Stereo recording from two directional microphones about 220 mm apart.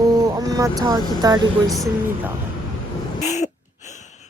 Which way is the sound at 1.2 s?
15° right (ahead or behind).